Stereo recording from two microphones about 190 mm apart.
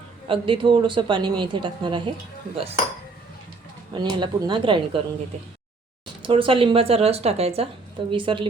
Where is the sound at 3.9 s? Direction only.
25° right (ahead or behind).